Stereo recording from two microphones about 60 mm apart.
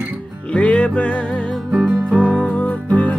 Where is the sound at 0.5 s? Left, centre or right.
Centre.